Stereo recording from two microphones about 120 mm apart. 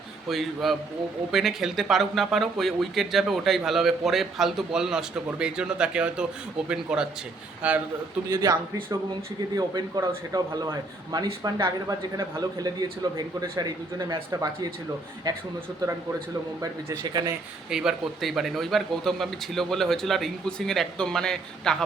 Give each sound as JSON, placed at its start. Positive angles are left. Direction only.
{"t": 0.3, "sound": "speech", "side_deg": 0}
{"t": 8.3, "sound": "speech", "side_deg": -30}
{"t": 16.6, "sound": "speech", "side_deg": -35}
{"t": 17.7, "sound": "speech", "side_deg": -5}